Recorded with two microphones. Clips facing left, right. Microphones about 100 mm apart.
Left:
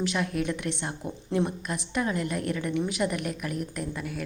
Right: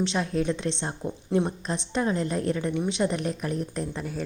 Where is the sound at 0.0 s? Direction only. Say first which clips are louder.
Right 2 dB; 25° right (ahead or behind).